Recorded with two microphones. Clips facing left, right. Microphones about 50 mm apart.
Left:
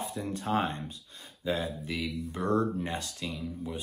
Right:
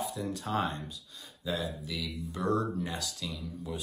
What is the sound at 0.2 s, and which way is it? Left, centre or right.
Speech, left.